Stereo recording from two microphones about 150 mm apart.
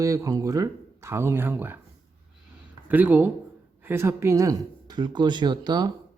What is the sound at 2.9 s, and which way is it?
Speech, 10° right (ahead or behind).